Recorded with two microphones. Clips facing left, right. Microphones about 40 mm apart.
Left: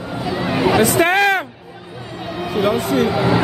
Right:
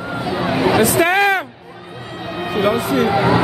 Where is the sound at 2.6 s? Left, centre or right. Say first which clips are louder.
Even; centre.